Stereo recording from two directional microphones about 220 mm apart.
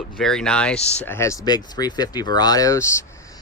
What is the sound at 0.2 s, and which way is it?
Speech, 5° left (ahead or behind).